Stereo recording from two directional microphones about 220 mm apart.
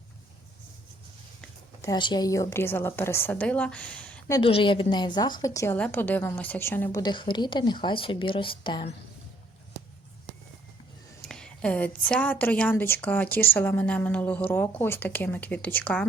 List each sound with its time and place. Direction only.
1.4 s a woman's voice: 15° left (ahead or behind)
4.4 s a woman's voice: 25° left (ahead or behind)
7.0 s speech: 20° left (ahead or behind)
11.2 s a woman's voice: 5° left (ahead or behind)